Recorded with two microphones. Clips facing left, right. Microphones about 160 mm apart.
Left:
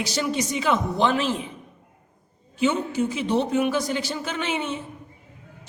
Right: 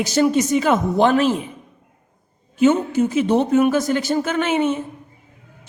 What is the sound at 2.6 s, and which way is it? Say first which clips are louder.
Speech: right 7 dB; 50° right (ahead or behind).